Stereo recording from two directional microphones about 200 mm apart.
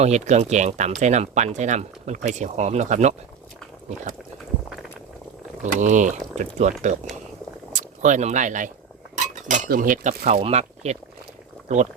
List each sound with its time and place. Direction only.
0.0 s speech: 35° right (ahead or behind)
5.8 s speech: 40° right (ahead or behind)